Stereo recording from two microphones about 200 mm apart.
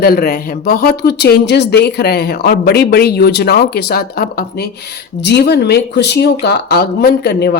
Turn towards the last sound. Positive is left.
turn(degrees=55)  # may be behind; listen again after turning